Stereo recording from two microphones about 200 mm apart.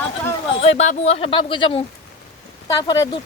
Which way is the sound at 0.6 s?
35° left (ahead or behind).